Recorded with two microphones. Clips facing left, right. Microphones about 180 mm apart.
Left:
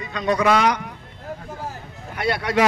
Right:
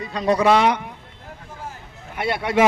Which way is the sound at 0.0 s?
30° right (ahead or behind).